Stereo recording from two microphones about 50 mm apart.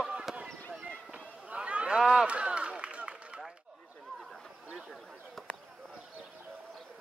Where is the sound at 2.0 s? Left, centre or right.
Centre.